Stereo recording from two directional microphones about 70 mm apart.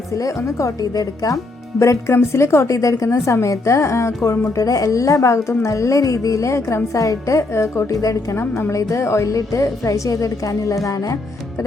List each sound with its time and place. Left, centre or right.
0.2 s a woman's voice: left
1.8 s a woman's voice: left